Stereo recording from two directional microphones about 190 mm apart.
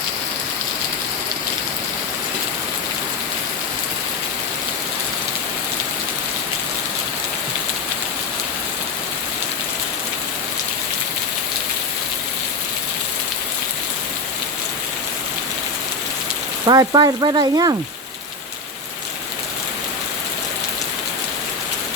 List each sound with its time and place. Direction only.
16.6 s speech: 20° right (ahead or behind)